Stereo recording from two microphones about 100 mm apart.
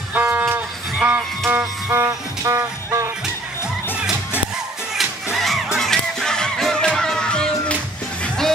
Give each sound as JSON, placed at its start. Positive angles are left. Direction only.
{"t": 0.1, "sound": "vehicle", "side_deg": -15}
{"t": 1.5, "sound": "music", "side_deg": -25}
{"t": 4.9, "sound": "music", "side_deg": 0}